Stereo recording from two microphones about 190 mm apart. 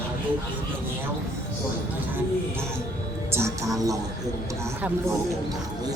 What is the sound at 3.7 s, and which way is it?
Speech, 15° right (ahead or behind).